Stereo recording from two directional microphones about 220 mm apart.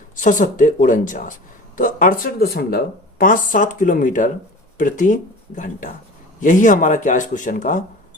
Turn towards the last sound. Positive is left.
turn(degrees=35)  # may be behind; listen again after turning